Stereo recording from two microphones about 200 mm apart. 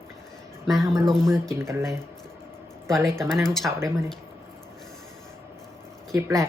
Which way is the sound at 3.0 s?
15° right (ahead or behind).